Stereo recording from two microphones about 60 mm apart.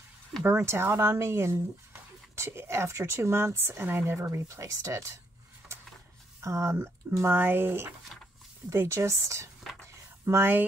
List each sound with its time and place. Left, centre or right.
0.4 s speech: right
6.4 s speech: right
6.7 s speech: right
8.8 s speech: right
9.9 s a sound: right